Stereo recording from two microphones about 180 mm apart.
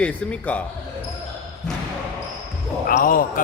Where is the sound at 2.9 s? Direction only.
50° left (ahead or behind).